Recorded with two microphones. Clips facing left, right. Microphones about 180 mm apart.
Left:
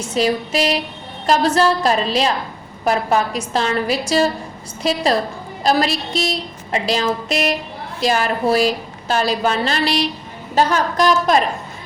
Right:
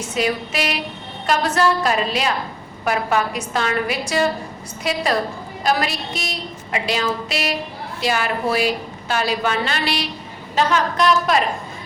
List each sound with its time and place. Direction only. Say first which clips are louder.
0.1 s a woman's voice: left 4 dB; 35° left (ahead or behind)